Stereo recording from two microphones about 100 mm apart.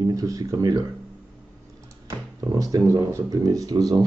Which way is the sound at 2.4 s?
35° right (ahead or behind).